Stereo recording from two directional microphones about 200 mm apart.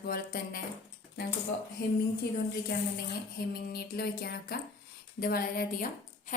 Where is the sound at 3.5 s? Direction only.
50° left (ahead or behind).